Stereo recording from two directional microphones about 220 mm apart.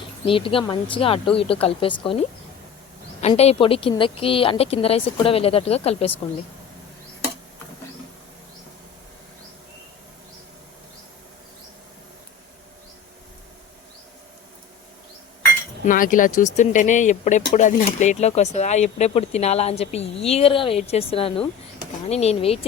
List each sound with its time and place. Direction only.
0.3 s speech: 25° left (ahead or behind)
15.8 s speech: 35° left (ahead or behind)